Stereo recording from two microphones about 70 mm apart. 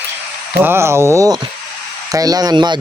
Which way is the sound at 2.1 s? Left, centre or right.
Right.